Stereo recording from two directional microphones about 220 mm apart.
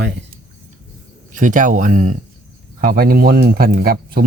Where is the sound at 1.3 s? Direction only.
35° right (ahead or behind).